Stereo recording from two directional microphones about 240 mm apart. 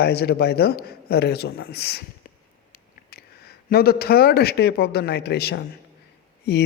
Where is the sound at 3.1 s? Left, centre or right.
Left.